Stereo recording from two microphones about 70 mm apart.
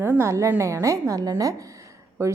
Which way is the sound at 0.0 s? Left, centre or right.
Right.